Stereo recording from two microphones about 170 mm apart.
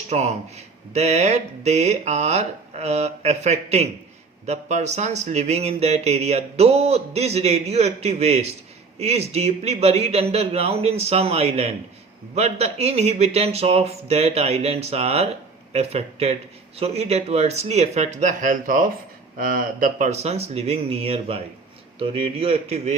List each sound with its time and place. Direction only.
0.1 s speech: 40° right (ahead or behind)